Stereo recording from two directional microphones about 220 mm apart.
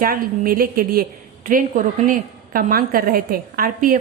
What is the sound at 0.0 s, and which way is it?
A woman's voice, 40° right (ahead or behind).